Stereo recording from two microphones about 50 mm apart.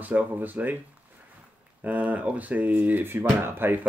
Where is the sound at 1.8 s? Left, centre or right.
Right.